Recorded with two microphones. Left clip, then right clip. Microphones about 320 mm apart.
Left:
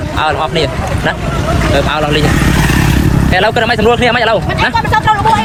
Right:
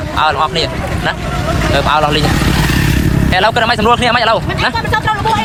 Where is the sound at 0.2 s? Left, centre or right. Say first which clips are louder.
Even; centre.